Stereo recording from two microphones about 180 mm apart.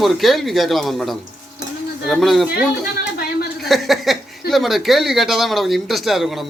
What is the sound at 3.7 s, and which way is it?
Speech, centre (ahead or behind).